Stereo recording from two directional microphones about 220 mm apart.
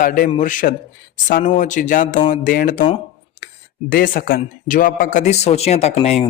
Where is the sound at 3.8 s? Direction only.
40° left (ahead or behind).